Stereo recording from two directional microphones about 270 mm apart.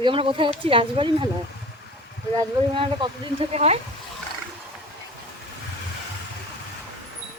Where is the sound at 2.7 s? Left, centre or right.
Centre.